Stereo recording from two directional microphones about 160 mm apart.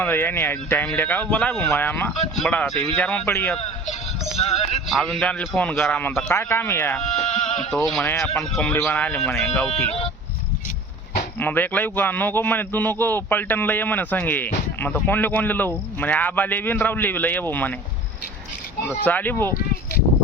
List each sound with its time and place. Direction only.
0.0 s a man's voice: 15° left (ahead or behind)
4.4 s speech: 40° left (ahead or behind)
5.0 s a man's voice: 10° left (ahead or behind)
7.0 s sheep: 45° left (ahead or behind)
8.2 s a man's voice: 5° left (ahead or behind)
11.3 s a man's voice: 10° left (ahead or behind)
19.0 s a man's voice: 10° left (ahead or behind)